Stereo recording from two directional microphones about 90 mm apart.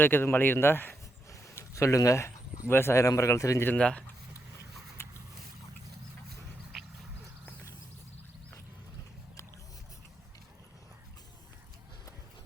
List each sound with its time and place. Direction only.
0.0 s speech: 25° left (ahead or behind)
1.3 s speech: 35° left (ahead or behind)
3.8 s speech: 10° left (ahead or behind)
6.7 s a sound: centre (ahead or behind)